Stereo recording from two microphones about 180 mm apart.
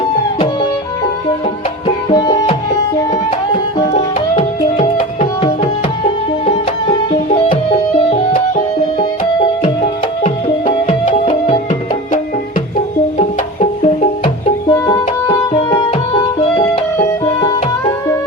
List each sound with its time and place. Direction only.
2.0 s music: 25° left (ahead or behind)
3.9 s tabla: 35° left (ahead or behind)
8.1 s music: 50° left (ahead or behind)
9.0 s music: 25° left (ahead or behind)
11.3 s music: 30° left (ahead or behind)
13.1 s music: 35° left (ahead or behind)
14.7 s music: 20° left (ahead or behind)